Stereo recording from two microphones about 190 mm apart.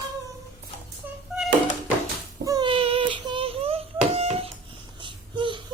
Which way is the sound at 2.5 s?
25° right (ahead or behind).